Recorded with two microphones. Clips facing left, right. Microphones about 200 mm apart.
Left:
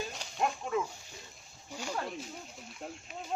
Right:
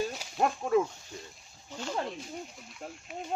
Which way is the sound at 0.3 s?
45° right (ahead or behind).